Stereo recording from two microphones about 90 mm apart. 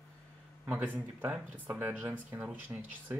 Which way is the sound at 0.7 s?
15° right (ahead or behind).